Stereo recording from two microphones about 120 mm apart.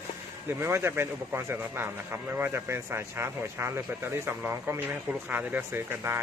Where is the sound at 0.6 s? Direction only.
20° right (ahead or behind).